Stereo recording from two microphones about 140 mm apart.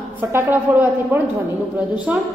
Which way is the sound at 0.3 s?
15° right (ahead or behind).